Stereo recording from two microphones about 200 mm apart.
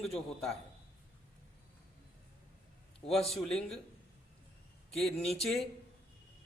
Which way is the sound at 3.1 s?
Centre (ahead or behind).